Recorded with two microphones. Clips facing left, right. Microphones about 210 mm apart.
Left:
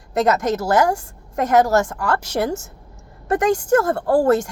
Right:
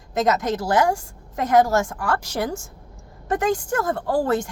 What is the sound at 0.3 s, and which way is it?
Speech, 45° left (ahead or behind).